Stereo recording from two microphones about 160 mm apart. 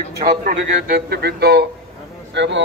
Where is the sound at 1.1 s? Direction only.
90° right.